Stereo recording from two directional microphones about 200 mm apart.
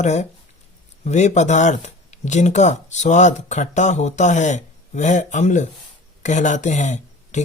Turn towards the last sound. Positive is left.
turn(degrees=35)  # may be behind; listen again after turning